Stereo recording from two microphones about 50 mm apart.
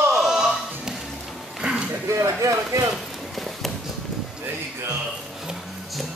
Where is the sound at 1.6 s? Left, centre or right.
Centre.